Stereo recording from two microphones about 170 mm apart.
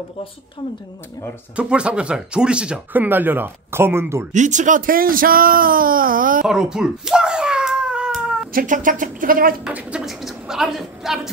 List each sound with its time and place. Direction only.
1.6 s speech: 5° right (ahead or behind)
4.3 s speech: 45° right (ahead or behind)
6.4 s a sound: 5° right (ahead or behind)
8.5 s speech: 50° right (ahead or behind)
9.7 s speech: 5° right (ahead or behind)